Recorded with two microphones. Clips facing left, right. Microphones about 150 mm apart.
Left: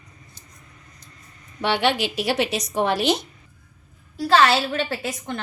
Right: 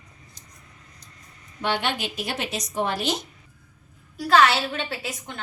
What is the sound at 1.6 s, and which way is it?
A woman's voice, 85° left.